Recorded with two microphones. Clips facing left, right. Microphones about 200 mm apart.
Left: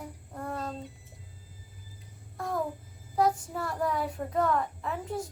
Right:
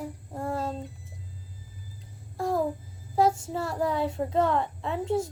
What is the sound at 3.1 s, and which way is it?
Speech, 25° right (ahead or behind).